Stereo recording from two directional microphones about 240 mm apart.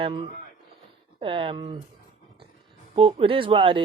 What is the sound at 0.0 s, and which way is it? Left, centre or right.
Speech, right.